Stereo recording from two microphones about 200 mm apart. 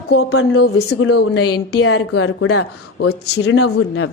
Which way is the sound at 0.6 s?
60° left (ahead or behind).